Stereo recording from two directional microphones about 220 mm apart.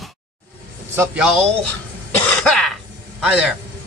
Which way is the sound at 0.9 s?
5° right (ahead or behind).